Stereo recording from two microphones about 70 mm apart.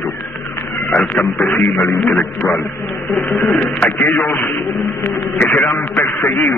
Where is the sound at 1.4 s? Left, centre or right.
Left.